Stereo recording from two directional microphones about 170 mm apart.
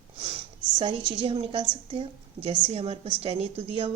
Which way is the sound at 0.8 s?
30° right (ahead or behind).